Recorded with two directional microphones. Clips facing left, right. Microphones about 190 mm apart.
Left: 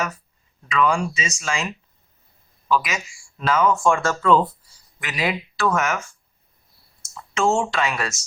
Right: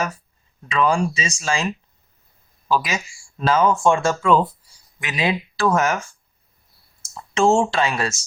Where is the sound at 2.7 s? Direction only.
30° right (ahead or behind); by 4.5 s 10° right (ahead or behind).